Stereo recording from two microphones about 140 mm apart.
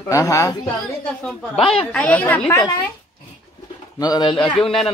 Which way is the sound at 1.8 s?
10° left (ahead or behind).